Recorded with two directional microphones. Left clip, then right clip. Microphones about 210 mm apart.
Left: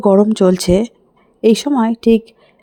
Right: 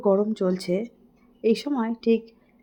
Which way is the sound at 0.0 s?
40° left (ahead or behind).